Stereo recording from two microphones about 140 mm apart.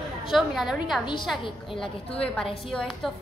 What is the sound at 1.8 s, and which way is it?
A woman's voice, 5° left (ahead or behind).